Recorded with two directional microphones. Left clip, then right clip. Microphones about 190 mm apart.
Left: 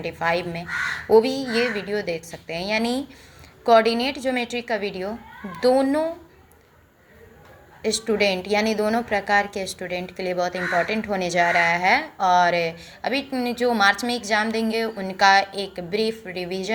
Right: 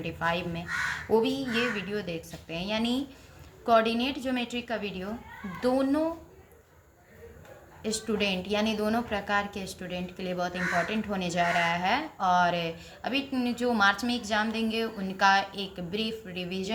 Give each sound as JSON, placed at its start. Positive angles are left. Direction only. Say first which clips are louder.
{"t": 0.0, "sound": "a woman's voice", "louder": "left 6 dB", "side_deg": 25}
{"t": 7.8, "sound": "a woman's voice", "louder": "left 9 dB", "side_deg": 20}